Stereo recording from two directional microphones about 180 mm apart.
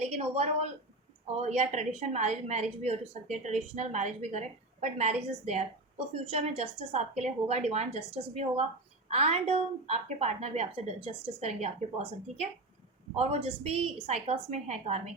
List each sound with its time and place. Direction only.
0.0 s a woman's voice: 35° right (ahead or behind)